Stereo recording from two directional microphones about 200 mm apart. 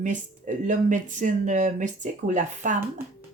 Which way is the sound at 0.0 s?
40° right (ahead or behind).